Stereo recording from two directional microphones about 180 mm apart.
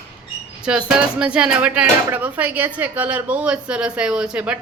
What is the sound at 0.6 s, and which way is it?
Speech, 5° right (ahead or behind).